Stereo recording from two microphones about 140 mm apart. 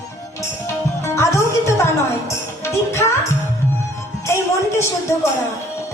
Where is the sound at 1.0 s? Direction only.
20° left (ahead or behind).